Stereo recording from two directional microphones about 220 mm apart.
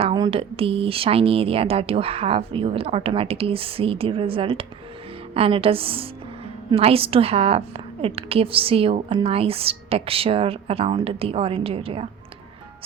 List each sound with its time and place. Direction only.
0.0 s speech: 20° right (ahead or behind)